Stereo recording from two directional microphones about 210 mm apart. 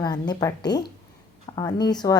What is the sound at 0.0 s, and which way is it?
Speech, 20° left (ahead or behind).